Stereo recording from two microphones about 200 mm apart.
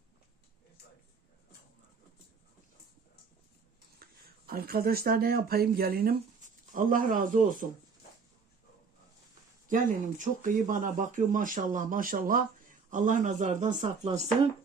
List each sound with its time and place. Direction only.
4.0 s speech: 50° right (ahead or behind)
9.6 s speech: 40° right (ahead or behind)